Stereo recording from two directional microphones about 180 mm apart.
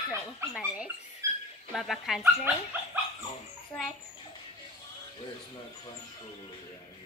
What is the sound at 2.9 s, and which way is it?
Dog, 10° right (ahead or behind).